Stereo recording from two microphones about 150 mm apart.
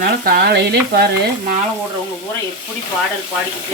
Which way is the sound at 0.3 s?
90° right.